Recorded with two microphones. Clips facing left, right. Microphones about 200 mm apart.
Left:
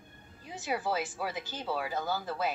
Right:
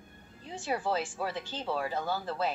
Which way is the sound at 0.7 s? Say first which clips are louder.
Right 1 dB; 5° left (ahead or behind).